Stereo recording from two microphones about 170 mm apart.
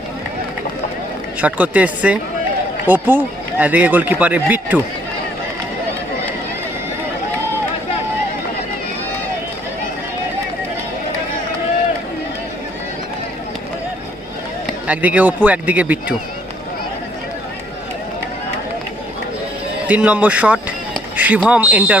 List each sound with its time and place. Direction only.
1.4 s a man's voice: 10° right (ahead or behind)
14.8 s a man's voice: 10° right (ahead or behind)
19.9 s a man's voice: 10° right (ahead or behind)
21.2 s a sound: 10° right (ahead or behind)
21.4 s a man's voice: 10° right (ahead or behind)